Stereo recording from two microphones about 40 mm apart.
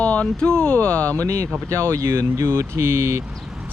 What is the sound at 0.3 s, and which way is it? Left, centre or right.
Speech, left.